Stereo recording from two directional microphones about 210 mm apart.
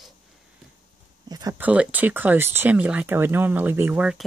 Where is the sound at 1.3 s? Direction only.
15° right (ahead or behind).